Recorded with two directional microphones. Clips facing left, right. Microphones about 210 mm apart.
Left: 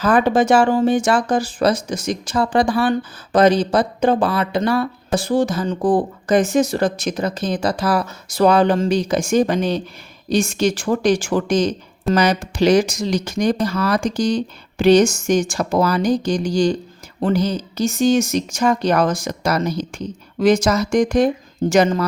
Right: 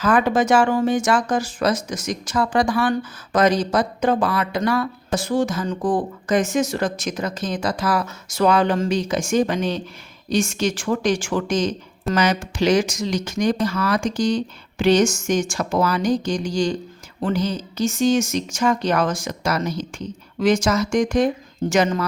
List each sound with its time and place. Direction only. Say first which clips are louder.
0.0 s speech: left 3 dB; 30° left (ahead or behind)